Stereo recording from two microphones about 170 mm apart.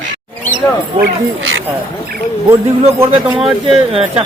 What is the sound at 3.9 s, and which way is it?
Speech, 35° right (ahead or behind).